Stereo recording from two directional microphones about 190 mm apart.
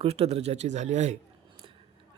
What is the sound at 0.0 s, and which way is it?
Speech, 35° right (ahead or behind).